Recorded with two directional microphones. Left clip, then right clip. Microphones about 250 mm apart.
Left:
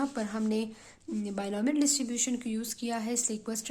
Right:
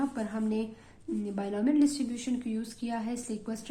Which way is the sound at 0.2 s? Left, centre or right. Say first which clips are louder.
Left 1 dB; left.